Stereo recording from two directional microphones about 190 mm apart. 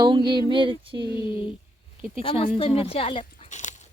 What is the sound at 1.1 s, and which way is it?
Speech, 25° left (ahead or behind).